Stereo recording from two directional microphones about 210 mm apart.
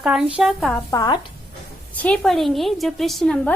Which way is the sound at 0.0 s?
5° right (ahead or behind).